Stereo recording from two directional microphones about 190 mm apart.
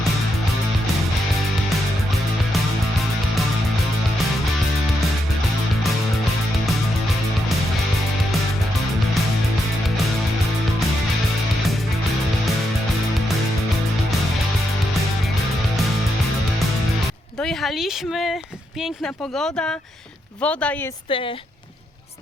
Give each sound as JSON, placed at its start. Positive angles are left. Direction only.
{"t": 17.4, "sound": "speech", "side_deg": 0}
{"t": 21.1, "sound": "speech", "side_deg": 30}